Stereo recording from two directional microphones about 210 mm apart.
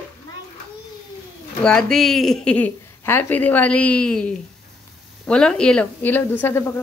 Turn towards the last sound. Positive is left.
turn(degrees=10)  # may be behind; listen again after turning